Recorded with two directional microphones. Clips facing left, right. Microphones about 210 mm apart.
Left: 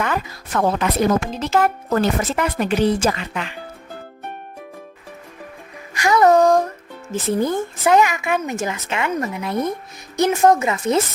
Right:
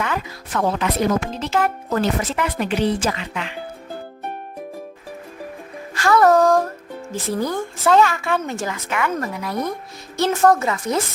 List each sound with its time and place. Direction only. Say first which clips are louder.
0.0 s speech: left 2 dB; 45° left (ahead or behind)
5.9 s speech: left 1 dB; 15° left (ahead or behind)